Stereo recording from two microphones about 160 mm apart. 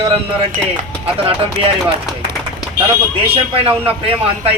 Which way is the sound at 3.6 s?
35° right (ahead or behind).